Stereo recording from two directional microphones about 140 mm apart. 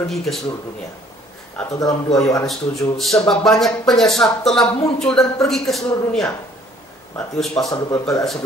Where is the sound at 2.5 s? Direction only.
Centre (ahead or behind).